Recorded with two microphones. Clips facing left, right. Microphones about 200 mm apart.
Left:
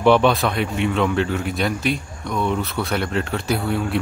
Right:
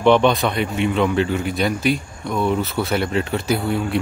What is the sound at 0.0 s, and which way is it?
A man's voice, 5° left (ahead or behind).